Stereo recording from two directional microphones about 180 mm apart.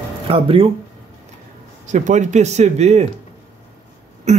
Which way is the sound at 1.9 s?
40° right (ahead or behind).